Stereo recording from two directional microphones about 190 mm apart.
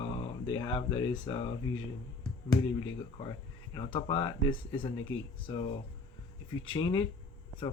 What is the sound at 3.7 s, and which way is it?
Speech, 25° left (ahead or behind).